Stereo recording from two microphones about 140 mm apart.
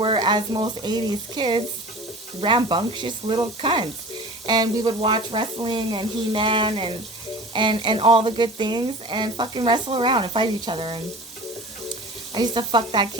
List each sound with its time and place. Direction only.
0.0 s speech: 35° right (ahead or behind)
12.3 s speech: 35° right (ahead or behind)